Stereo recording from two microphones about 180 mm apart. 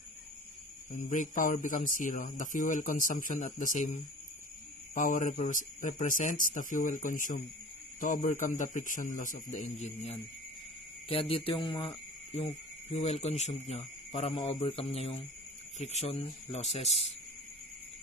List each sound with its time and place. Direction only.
0.9 s speech: 45° left (ahead or behind); by 12.0 s 25° left (ahead or behind)
12.9 s speech: 35° left (ahead or behind)